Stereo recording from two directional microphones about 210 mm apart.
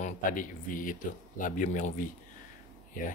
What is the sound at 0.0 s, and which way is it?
Speech, 40° left (ahead or behind).